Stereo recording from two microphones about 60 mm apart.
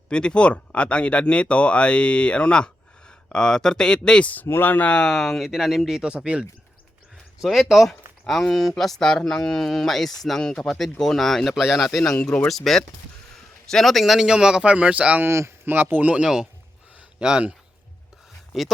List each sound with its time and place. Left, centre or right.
0.1 s speech: centre
4.4 s speech: left
4.9 s speech: centre
5.5 s speech: centre
7.4 s speech: centre
12.1 s speech: centre; by 15.2 s right
15.3 s speech: right
15.7 s speech: right
16.2 s speech: centre
17.0 s a sound: centre
18.5 s speech: centre